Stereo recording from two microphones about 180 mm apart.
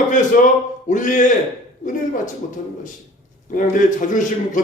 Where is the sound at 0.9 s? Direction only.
45° left (ahead or behind).